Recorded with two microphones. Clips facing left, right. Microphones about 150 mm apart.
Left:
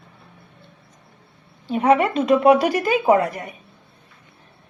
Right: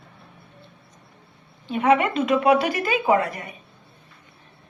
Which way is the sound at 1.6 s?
40° left (ahead or behind).